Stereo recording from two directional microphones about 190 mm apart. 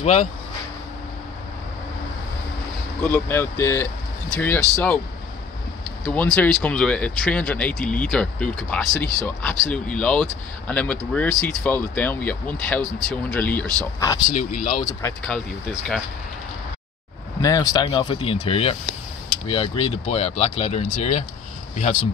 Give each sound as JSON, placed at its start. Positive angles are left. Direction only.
{"t": 0.0, "sound": "speech", "side_deg": 35}
{"t": 3.0, "sound": "speech", "side_deg": 10}
{"t": 6.0, "sound": "speech", "side_deg": 5}
{"t": 14.3, "sound": "speech", "side_deg": 50}
{"t": 15.2, "sound": "speech", "side_deg": 0}
{"t": 17.4, "sound": "speech", "side_deg": 20}